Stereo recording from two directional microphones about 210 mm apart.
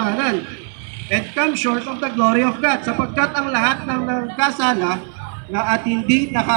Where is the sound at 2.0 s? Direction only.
Centre (ahead or behind).